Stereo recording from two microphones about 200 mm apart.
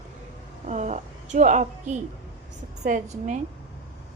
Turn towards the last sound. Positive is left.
turn(degrees=-40)  # may be behind; listen again after turning